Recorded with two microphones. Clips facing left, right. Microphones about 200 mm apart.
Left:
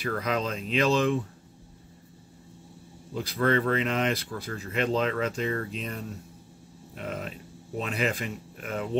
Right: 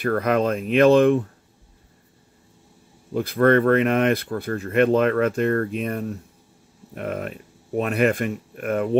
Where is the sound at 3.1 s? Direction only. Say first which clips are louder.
Right 8 dB; 55° right (ahead or behind).